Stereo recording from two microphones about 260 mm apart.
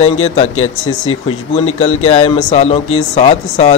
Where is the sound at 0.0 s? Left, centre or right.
Left.